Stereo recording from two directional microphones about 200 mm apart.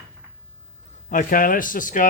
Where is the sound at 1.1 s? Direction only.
40° left (ahead or behind).